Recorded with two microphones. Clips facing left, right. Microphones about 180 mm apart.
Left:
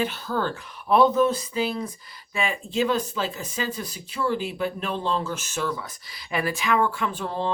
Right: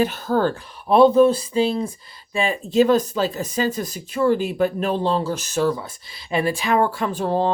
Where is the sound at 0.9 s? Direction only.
30° right (ahead or behind).